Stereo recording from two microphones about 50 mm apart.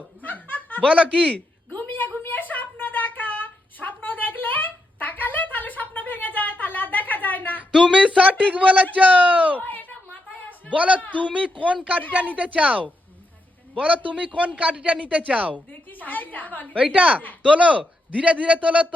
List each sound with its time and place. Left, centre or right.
0.2 s snicker: left
0.8 s speech: right
1.7 s a sound: left
7.7 s speech: centre
8.4 s a man's voice: right
9.6 s a sound: left
10.8 s speech: right
11.0 s a man's voice: left
11.3 s speech: right
15.9 s a woman's voice: left
16.7 s speech: right